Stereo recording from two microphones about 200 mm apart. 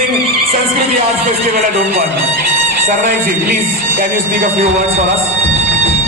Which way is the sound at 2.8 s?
35° right (ahead or behind).